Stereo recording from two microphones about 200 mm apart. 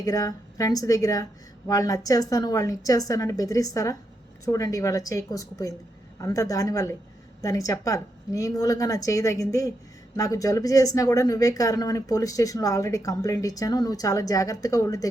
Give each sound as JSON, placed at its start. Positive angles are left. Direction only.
{"t": 0.0, "sound": "speech", "side_deg": 20}